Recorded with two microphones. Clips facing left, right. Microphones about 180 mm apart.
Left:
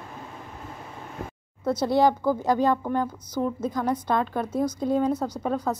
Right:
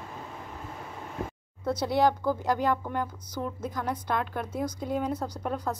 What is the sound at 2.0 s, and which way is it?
Speech, 10° left (ahead or behind).